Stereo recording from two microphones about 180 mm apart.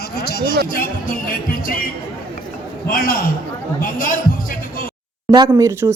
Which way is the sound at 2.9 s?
50° left (ahead or behind).